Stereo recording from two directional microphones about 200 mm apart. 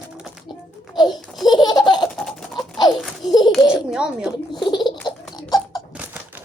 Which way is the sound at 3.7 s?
5° right (ahead or behind).